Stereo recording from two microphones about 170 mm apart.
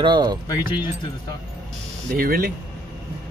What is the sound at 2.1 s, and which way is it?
Speech, 60° right (ahead or behind).